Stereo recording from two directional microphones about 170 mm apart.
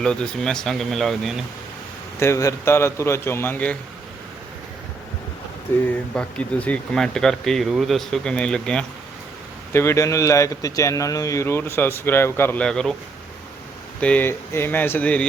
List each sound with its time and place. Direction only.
0.0 s speech: 5° left (ahead or behind)
2.1 s speech: 15° left (ahead or behind)
6.1 s speech: 5° left (ahead or behind)
9.7 s speech: 15° left (ahead or behind)
14.0 s speech: 10° left (ahead or behind)